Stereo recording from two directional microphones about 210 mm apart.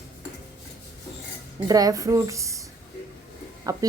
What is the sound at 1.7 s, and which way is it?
A woman's voice, 15° right (ahead or behind).